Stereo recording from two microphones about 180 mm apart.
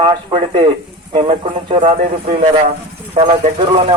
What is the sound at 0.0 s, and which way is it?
Speech, 30° right (ahead or behind).